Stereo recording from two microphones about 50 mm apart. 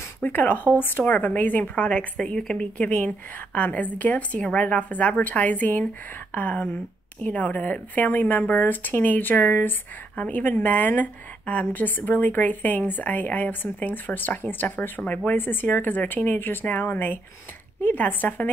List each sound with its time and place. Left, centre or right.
0.2 s a woman's voice: left
1.9 s a woman's voice: left
2.6 s a woman's voice: left